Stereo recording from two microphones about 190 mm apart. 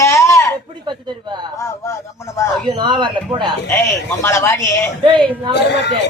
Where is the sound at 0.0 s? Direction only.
15° left (ahead or behind).